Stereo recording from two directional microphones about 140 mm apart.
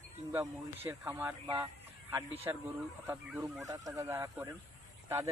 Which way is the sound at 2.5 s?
25° right (ahead or behind).